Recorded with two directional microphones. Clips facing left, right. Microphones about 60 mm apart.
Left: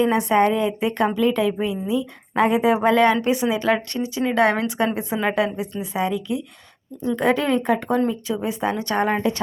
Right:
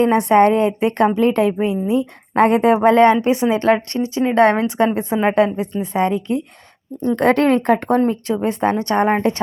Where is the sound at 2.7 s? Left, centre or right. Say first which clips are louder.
Right 5 dB; right.